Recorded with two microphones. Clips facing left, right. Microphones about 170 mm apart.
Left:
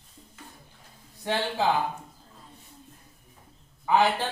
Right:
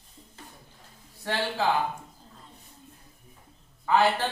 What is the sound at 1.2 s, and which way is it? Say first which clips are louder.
Speech: left 1 dB; 15° left (ahead or behind).